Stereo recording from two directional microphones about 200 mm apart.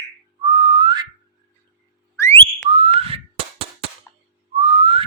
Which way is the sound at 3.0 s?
30° right (ahead or behind).